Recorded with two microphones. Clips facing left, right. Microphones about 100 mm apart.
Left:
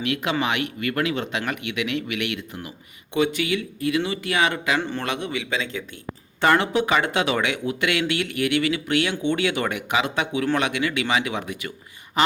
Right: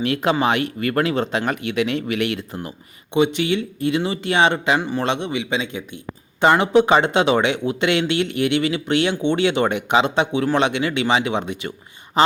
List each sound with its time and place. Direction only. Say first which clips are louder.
0.0 s speech: right 5 dB; 35° right (ahead or behind)
3.1 s speech: right 4 dB; 25° right (ahead or behind)
4.8 s a man's voice: right 4 dB; 10° right (ahead or behind)
5.0 s speech: right 5 dB; 25° right (ahead or behind)